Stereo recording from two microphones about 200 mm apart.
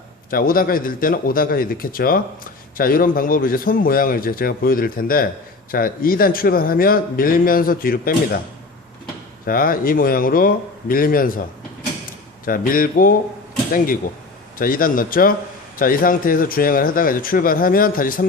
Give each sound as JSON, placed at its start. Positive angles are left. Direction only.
{"t": 0.3, "sound": "a man's voice", "side_deg": 45}
{"t": 9.5, "sound": "a man's voice", "side_deg": 45}
{"t": 12.5, "sound": "a man's voice", "side_deg": 45}